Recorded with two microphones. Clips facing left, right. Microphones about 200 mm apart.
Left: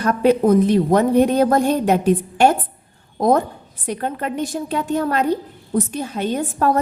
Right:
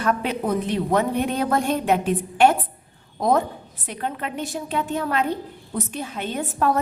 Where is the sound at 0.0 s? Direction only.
40° left (ahead or behind).